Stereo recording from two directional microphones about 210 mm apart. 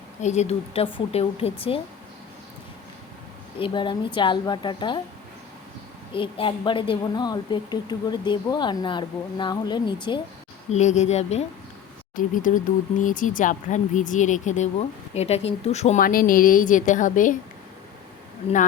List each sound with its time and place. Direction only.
0.2 s speech: 35° left (ahead or behind)
3.6 s speech: 20° left (ahead or behind)
6.1 s speech: 25° left (ahead or behind)
10.7 s speech: 35° left (ahead or behind)